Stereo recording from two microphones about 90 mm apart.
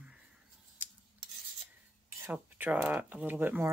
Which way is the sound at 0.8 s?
20° right (ahead or behind).